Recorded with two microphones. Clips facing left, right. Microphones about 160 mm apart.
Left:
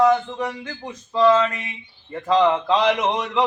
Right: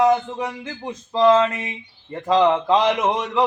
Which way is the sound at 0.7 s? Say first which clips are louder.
Right 3 dB; 25° right (ahead or behind).